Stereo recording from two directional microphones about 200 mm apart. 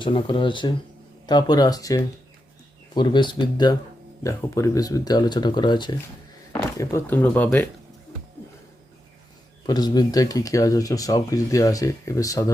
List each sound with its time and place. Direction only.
0.0 s speech: 25° left (ahead or behind)
6.5 s speech: 10° left (ahead or behind)
9.6 s speech: 20° left (ahead or behind)